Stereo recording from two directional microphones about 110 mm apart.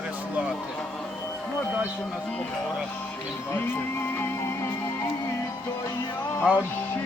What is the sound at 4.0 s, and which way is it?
Music, 20° left (ahead or behind).